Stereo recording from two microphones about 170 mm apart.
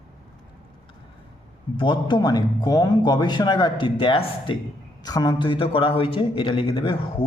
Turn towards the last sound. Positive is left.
turn(degrees=30)  # may be behind; listen again after turning